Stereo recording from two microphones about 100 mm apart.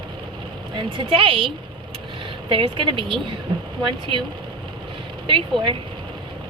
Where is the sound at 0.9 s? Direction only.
60° right (ahead or behind).